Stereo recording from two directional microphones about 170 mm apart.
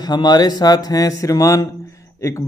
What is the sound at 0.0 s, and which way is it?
A man's voice, 25° left (ahead or behind).